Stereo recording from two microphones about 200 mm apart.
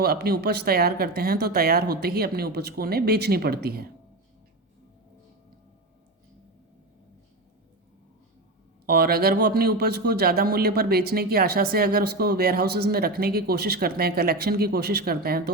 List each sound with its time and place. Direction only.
0.0 s a man's voice: 50° right (ahead or behind)
8.9 s a man's voice: 50° right (ahead or behind)